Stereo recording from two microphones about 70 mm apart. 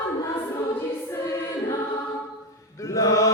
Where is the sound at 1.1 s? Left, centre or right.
Left.